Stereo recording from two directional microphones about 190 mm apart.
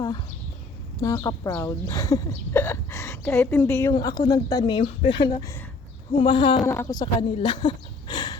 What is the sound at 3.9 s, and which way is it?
Speech, 20° left (ahead or behind).